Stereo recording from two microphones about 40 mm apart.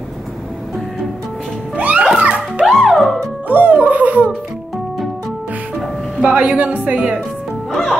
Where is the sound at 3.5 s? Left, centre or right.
Right.